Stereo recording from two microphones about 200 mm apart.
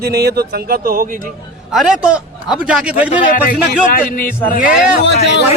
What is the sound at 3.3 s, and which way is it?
Speech, 45° left (ahead or behind).